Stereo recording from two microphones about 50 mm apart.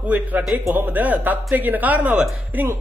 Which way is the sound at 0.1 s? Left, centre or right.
Right.